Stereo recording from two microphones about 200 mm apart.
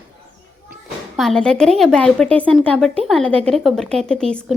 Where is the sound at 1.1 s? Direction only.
Centre (ahead or behind).